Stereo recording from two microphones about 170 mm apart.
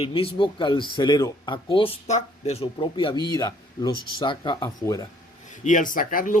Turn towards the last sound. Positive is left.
turn(degrees=55)  # may be behind; listen again after turning